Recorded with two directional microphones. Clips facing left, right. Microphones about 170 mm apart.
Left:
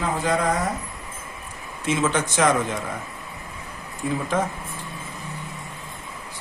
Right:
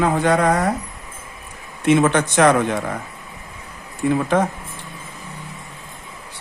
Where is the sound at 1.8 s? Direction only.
65° right (ahead or behind).